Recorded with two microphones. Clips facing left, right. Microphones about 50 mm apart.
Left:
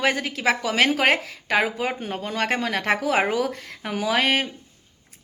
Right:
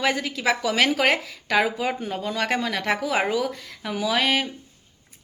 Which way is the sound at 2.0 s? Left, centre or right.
Left.